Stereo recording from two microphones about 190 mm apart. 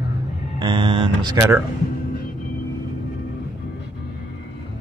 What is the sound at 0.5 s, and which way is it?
Speech, 25° right (ahead or behind).